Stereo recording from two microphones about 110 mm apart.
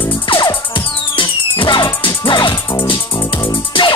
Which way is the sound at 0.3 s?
45° left (ahead or behind).